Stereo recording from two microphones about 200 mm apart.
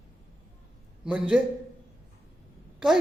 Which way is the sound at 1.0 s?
5° right (ahead or behind).